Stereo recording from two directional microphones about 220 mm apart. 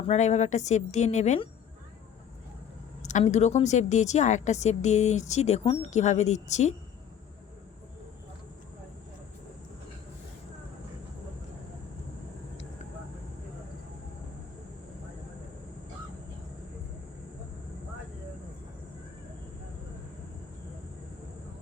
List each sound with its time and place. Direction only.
0.1 s speech: 30° left (ahead or behind)
3.0 s speech: 35° left (ahead or behind)